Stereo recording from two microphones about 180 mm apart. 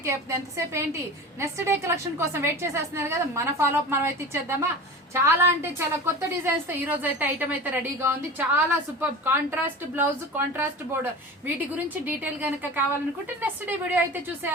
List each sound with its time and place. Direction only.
0.0 s a woman's voice: 15° right (ahead or behind)